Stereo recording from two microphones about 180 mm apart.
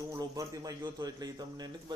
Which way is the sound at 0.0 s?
20° right (ahead or behind).